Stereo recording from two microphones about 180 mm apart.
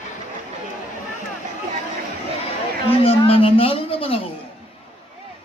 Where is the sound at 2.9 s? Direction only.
30° left (ahead or behind).